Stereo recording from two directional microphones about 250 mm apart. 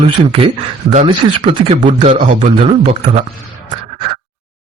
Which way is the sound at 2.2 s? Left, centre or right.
Right.